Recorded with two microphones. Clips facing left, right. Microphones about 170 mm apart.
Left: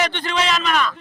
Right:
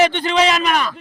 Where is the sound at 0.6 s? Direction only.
45° right (ahead or behind).